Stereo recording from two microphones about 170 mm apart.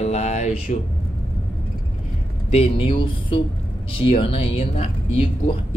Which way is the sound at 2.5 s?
30° left (ahead or behind).